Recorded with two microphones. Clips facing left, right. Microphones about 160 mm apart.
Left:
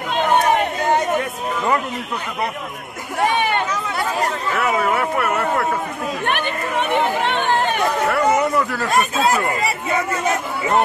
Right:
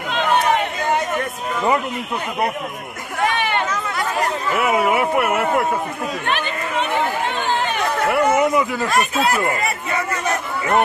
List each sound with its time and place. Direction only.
4.6 s speech: 10° right (ahead or behind)
7.2 s chatter: 65° left (ahead or behind)
8.1 s speech: 5° right (ahead or behind)